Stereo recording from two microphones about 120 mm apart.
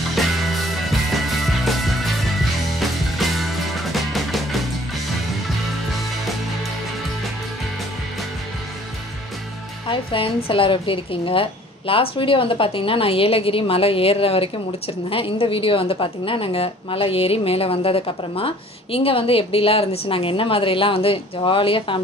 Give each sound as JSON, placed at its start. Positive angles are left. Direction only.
{"t": 0.1, "sound": "music", "side_deg": 0}
{"t": 9.8, "sound": "a woman's voice", "side_deg": 50}